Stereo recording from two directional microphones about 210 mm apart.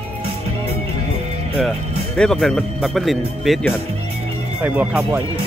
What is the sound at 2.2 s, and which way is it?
Speech, centre (ahead or behind).